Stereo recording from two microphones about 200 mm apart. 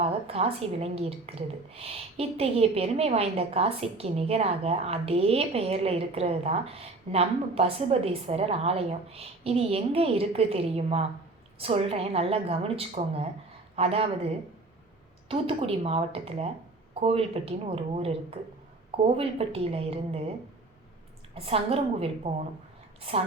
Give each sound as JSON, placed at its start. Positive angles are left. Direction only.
{"t": 0.0, "sound": "a woman's voice", "side_deg": -30}
{"t": 15.3, "sound": "a woman's voice", "side_deg": -30}
{"t": 21.3, "sound": "a woman's voice", "side_deg": -30}